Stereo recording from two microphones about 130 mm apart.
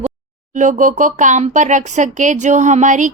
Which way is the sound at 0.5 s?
75° right (ahead or behind).